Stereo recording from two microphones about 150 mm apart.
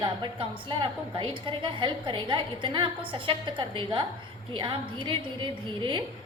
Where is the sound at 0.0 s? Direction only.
35° right (ahead or behind).